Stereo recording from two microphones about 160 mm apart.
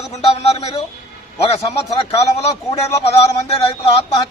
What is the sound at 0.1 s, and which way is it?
Speech, 40° left (ahead or behind).